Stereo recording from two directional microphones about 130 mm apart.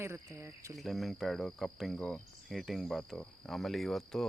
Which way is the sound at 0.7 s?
Centre (ahead or behind).